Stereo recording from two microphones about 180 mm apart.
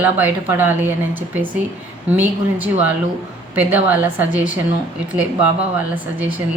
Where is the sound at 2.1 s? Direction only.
10° right (ahead or behind).